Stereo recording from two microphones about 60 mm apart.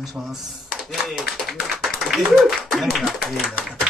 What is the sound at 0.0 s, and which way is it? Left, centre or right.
Speech, centre.